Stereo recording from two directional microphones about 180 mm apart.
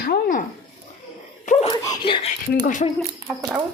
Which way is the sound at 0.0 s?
50° left (ahead or behind).